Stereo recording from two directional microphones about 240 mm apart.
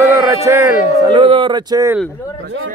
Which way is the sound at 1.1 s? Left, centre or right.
Right.